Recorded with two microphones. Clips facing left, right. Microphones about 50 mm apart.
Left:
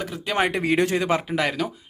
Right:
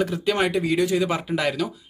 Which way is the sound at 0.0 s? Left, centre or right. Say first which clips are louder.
Right 6 dB; centre.